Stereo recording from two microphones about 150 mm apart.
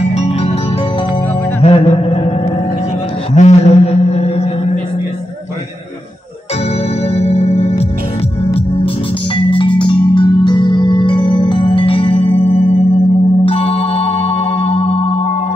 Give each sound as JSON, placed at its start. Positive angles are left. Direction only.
{"t": 0.1, "sound": "music", "side_deg": 45}
{"t": 1.6, "sound": "mantra", "side_deg": 45}
{"t": 3.3, "sound": "a sound", "side_deg": 45}
{"t": 7.2, "sound": "music", "side_deg": 45}
{"t": 9.5, "sound": "marimba", "side_deg": 35}
{"t": 9.8, "sound": "music", "side_deg": 35}